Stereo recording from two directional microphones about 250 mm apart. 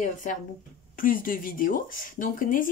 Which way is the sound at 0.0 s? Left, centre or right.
Left.